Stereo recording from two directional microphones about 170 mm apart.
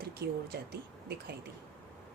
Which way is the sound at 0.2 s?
70° right (ahead or behind).